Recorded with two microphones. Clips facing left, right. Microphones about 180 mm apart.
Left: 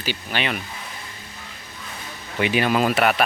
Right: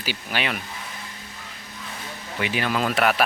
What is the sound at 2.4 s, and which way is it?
Speech, 20° left (ahead or behind).